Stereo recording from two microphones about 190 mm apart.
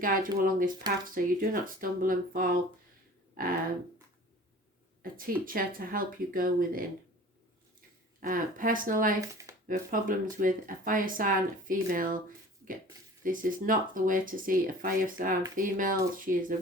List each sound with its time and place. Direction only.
0.0 s speech: 45° right (ahead or behind)
5.1 s speech: 50° right (ahead or behind)
8.2 s speech: 45° right (ahead or behind)
13.2 s speech: 45° right (ahead or behind)